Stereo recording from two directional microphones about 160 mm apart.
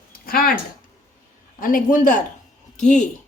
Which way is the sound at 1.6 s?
60° left (ahead or behind).